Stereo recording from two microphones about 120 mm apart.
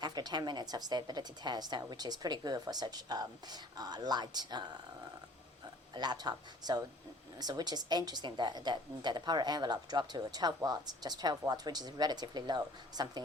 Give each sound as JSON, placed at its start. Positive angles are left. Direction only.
{"t": 0.0, "sound": "speech", "side_deg": -35}
{"t": 5.9, "sound": "speech", "side_deg": -35}